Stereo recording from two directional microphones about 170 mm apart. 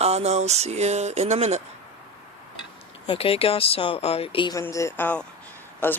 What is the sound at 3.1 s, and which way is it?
Speech, 35° left (ahead or behind).